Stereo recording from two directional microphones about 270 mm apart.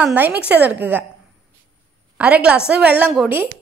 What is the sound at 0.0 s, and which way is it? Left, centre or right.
A woman's voice, centre.